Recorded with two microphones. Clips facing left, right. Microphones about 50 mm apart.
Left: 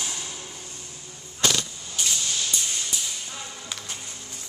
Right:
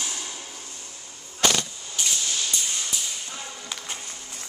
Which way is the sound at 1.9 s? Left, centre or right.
Centre.